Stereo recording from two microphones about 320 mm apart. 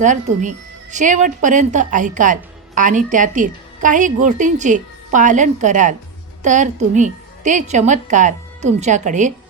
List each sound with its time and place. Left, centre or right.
0.0 s a woman's voice: right